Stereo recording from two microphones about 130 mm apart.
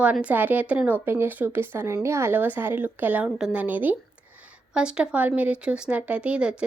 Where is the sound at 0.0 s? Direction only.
10° right (ahead or behind).